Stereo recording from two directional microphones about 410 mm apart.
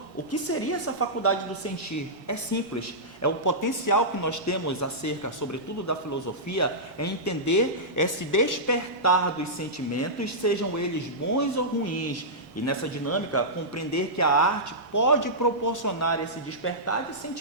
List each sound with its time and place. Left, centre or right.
0.3 s speech: left